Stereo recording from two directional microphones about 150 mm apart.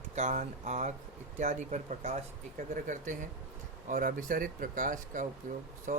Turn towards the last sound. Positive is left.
turn(degrees=-60)  # may be behind; listen again after turning